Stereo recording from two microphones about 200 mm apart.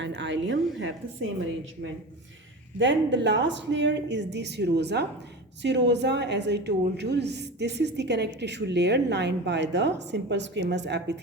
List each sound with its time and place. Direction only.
0.0 s a woman's voice: 65° right (ahead or behind)
2.7 s a woman's voice: 65° right (ahead or behind)